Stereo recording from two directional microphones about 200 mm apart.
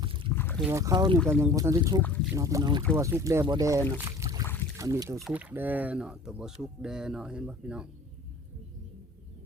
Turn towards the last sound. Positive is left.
turn(degrees=-5)  # may be behind; listen again after turning